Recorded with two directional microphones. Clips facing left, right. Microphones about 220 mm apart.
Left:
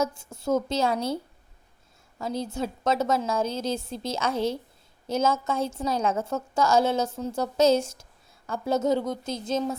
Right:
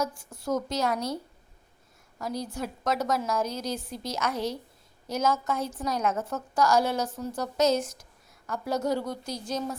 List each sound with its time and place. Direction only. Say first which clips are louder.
0.0 s a woman's voice: left 4 dB; 25° left (ahead or behind)